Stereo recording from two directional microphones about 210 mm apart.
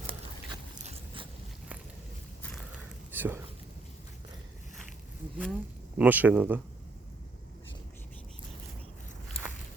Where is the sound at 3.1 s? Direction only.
10° right (ahead or behind).